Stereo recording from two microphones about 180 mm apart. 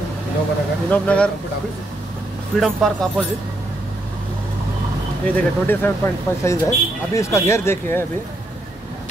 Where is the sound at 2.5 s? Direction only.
Centre (ahead or behind).